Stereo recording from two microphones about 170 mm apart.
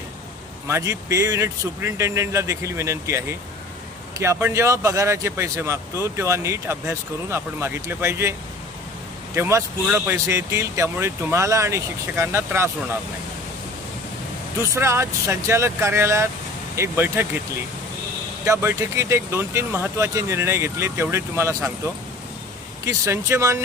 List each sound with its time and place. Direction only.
0.7 s speech: 15° right (ahead or behind)
14.7 s speech: 15° right (ahead or behind)
18.4 s speech: 15° right (ahead or behind)
22.9 s speech: 15° right (ahead or behind)